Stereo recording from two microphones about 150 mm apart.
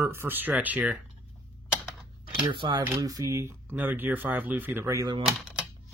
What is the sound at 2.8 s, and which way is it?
Speech, 20° right (ahead or behind).